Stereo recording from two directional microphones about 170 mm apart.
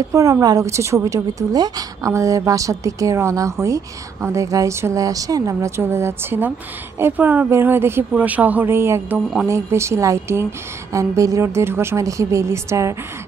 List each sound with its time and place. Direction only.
0.1 s a woman's voice: 20° right (ahead or behind)